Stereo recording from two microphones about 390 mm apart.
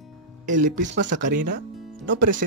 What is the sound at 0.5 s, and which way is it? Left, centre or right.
Speech, centre.